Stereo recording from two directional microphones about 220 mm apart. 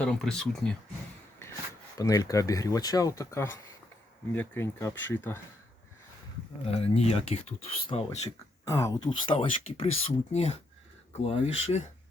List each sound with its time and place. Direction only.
0.0 s speech: 5° left (ahead or behind)
2.0 s speech: 15° left (ahead or behind)
6.7 s speech: 25° left (ahead or behind)
8.6 s speech: 15° left (ahead or behind); by 11.8 s 30° left (ahead or behind)